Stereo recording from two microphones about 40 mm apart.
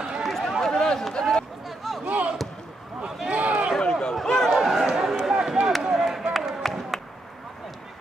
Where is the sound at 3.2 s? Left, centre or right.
Right.